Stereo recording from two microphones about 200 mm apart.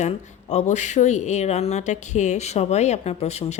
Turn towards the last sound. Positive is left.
turn(degrees=30)  # may be behind; listen again after turning